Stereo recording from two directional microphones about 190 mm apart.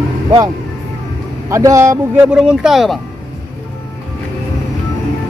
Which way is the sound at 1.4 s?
15° right (ahead or behind).